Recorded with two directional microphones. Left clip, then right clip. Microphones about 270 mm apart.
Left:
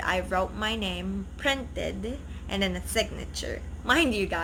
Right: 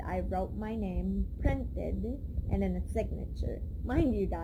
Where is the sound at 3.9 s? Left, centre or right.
Centre.